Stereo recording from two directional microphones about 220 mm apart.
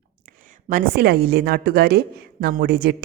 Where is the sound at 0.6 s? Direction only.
40° right (ahead or behind).